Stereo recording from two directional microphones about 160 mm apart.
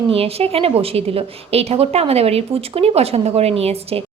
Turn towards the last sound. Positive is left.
turn(degrees=-40)  # may be behind; listen again after turning